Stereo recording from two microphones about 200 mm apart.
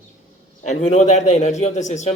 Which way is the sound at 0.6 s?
35° left (ahead or behind).